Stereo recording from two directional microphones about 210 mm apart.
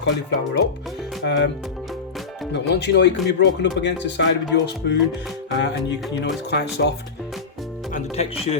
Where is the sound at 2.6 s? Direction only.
55° left (ahead or behind).